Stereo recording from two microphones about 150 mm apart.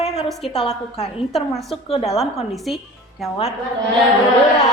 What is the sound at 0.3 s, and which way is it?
Speech, centre (ahead or behind).